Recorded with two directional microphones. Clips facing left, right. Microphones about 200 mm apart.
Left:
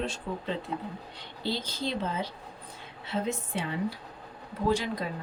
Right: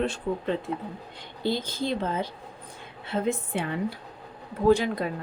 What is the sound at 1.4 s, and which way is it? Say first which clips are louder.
Speech: right 4 dB; 50° right (ahead or behind).